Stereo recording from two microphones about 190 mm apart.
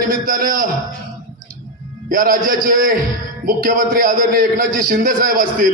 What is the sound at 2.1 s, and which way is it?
A man's voice, 45° right (ahead or behind).